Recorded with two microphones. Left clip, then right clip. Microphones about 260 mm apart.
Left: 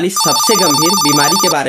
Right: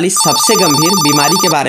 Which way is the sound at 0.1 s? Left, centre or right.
Centre.